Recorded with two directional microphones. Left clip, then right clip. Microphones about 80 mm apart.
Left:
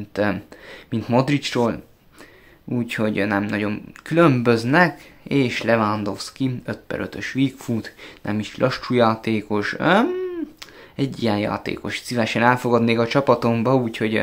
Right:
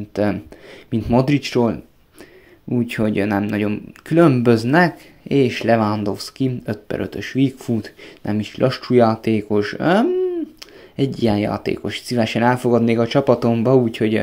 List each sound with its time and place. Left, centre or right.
0.1 s speech: right
2.9 s speech: right
10.0 s a sound: centre
11.0 s speech: right